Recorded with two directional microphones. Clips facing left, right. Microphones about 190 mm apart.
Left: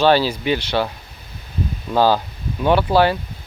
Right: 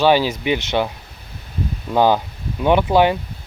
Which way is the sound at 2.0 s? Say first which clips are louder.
Right 1 dB; 15° right (ahead or behind).